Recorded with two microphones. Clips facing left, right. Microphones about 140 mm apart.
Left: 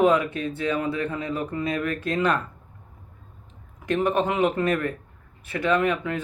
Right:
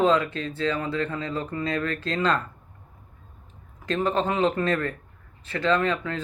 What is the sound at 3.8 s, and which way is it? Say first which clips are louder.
Speech: left 2 dB; 15° left (ahead or behind).